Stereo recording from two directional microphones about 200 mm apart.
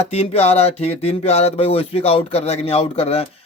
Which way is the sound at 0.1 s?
30° left (ahead or behind).